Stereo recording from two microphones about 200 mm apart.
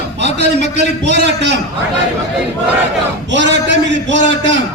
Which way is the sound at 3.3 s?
65° right (ahead or behind).